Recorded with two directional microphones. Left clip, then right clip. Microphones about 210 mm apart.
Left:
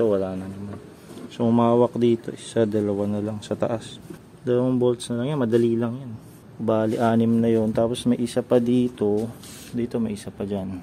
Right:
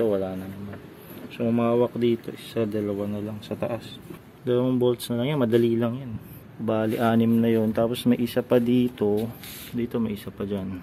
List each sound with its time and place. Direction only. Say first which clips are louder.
0.0 s a man's voice: left 3 dB; 10° left (ahead or behind)
1.4 s speech: left 4 dB; 25° left (ahead or behind)
4.5 s speech: left 2 dB; 5° left (ahead or behind)